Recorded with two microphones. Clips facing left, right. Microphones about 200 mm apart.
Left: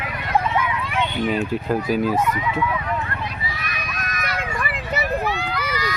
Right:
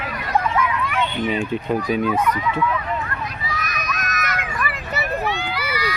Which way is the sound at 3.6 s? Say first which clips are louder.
Right 3 dB; 45° right (ahead or behind).